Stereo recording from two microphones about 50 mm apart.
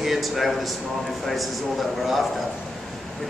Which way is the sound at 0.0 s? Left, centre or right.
Centre.